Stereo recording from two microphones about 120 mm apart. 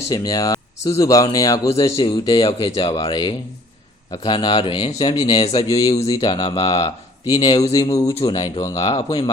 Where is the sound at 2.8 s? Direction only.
35° left (ahead or behind); by 5.8 s 50° left (ahead or behind).